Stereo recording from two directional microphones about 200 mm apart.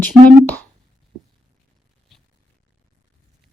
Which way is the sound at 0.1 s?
5° left (ahead or behind).